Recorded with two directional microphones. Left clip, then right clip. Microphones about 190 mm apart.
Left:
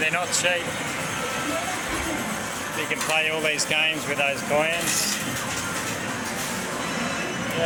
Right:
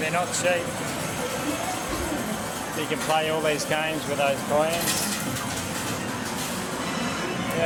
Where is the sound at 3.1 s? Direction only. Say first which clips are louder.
Even; 15° right (ahead or behind).